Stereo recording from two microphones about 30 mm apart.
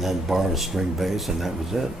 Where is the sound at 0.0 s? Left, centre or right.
Centre.